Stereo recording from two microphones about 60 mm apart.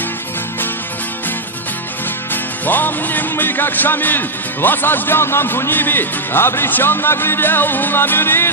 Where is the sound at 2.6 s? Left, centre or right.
Left.